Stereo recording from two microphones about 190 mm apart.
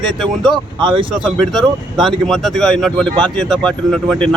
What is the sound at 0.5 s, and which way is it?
Speech, 25° right (ahead or behind).